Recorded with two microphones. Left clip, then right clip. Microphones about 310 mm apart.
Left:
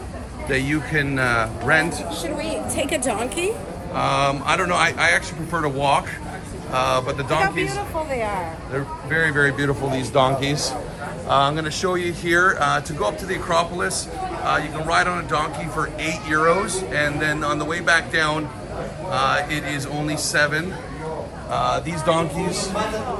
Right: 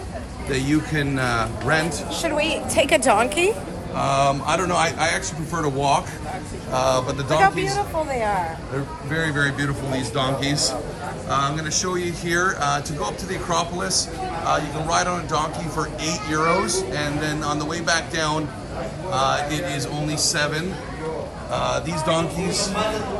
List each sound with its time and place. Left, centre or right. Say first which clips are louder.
0.5 s a man's voice: left 1 dB; centre
7.4 s speech: right 3 dB; right
8.7 s a man's voice: left 3 dB; centre